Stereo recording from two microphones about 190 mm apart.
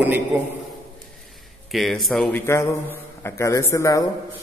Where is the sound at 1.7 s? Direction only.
Centre (ahead or behind).